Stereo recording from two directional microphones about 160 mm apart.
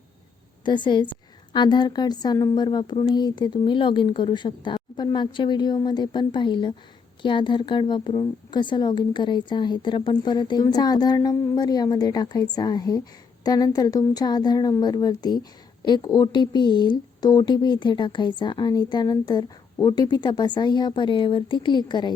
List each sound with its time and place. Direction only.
0.6 s a woman's voice: 30° left (ahead or behind)